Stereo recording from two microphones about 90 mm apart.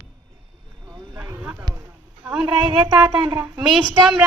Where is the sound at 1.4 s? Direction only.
15° right (ahead or behind).